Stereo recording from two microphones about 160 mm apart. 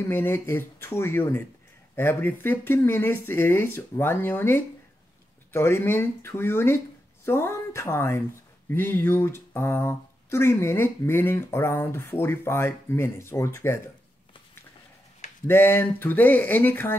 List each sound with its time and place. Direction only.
0.0 s speech: 15° left (ahead or behind)
15.4 s speech: 15° left (ahead or behind)